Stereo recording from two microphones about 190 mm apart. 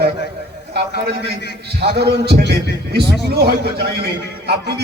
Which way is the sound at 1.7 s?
60° right (ahead or behind).